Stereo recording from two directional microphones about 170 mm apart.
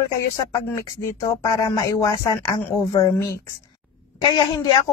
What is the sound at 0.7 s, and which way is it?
Speech, 15° left (ahead or behind).